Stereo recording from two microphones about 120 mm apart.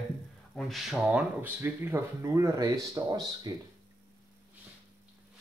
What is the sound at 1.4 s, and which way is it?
Speech, 20° right (ahead or behind).